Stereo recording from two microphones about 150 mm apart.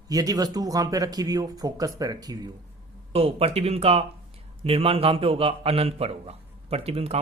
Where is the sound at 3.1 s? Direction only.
40° right (ahead or behind).